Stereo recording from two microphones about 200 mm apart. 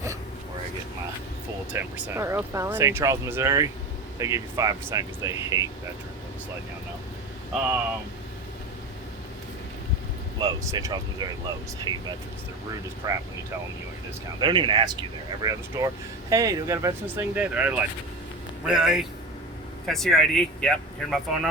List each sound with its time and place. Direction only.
1.7 s speech: 10° right (ahead or behind)
10.4 s speech: 15° right (ahead or behind)
13.0 s speech: 20° right (ahead or behind)
14.4 s speech: 25° right (ahead or behind); by 21.5 s centre (ahead or behind)